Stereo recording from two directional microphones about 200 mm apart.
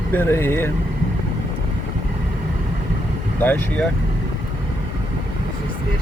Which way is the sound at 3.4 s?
10° left (ahead or behind).